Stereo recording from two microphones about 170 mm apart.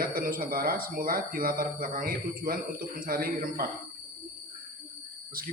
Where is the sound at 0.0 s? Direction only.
55° right (ahead or behind).